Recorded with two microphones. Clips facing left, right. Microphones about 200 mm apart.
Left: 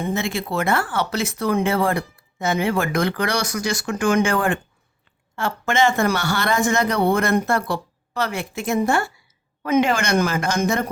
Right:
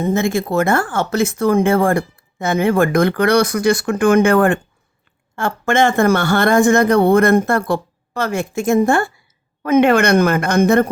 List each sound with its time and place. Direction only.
0.0 s a woman's voice: 45° right (ahead or behind)